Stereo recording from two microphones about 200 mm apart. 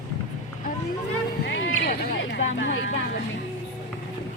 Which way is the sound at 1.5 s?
65° left (ahead or behind).